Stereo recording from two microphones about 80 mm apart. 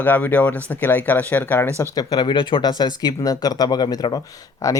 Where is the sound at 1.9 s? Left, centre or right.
Left.